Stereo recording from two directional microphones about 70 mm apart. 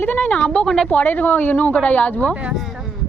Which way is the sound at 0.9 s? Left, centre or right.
Left.